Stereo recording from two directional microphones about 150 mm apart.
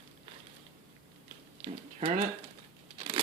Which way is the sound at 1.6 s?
45° right (ahead or behind).